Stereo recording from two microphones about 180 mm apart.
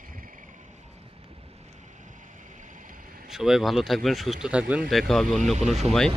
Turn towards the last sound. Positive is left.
turn(degrees=0)  # may be behind; listen again after turning